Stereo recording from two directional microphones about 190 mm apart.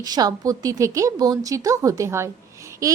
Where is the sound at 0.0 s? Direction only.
20° right (ahead or behind).